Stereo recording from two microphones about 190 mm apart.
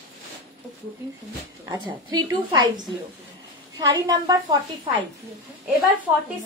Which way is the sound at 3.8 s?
20° right (ahead or behind).